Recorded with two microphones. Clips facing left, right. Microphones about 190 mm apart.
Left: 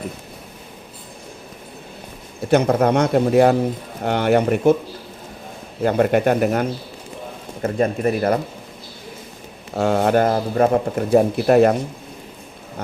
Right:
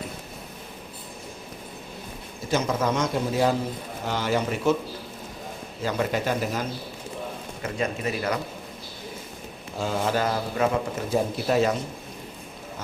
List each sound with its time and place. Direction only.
2.4 s speech: 65° left (ahead or behind)
5.8 s speech: 55° left (ahead or behind)
7.6 s speech: 50° left (ahead or behind)
9.7 s speech: 70° left (ahead or behind)